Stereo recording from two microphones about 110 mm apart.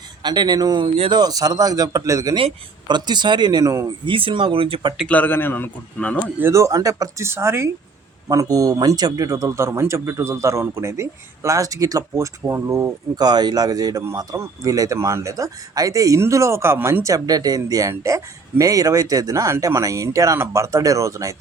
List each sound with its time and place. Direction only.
0.2 s speech: 40° right (ahead or behind)
2.3 s speech: 45° right (ahead or behind)
4.0 s speech: 50° right (ahead or behind)
5.0 s speech: 15° left (ahead or behind)
6.4 s speech: 30° right (ahead or behind)
13.1 s speech: 40° right (ahead or behind)